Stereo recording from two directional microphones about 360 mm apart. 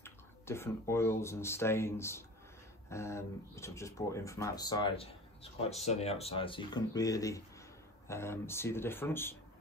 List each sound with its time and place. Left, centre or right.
0.0 s speech: centre